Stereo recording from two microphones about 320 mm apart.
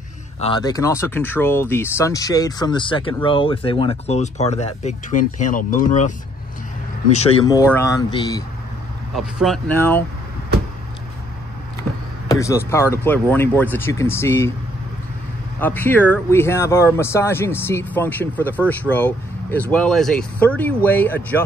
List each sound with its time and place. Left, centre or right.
0.4 s speech: centre
9.1 s speech: centre
12.3 s speech: centre
15.6 s speech: centre